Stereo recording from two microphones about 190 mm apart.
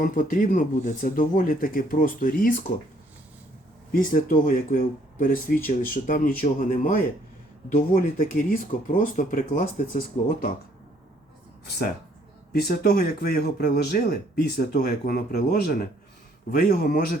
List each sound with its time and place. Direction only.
0.0 s speech: 45° left (ahead or behind)
3.9 s speech: 45° left (ahead or behind)
12.5 s speech: 55° left (ahead or behind)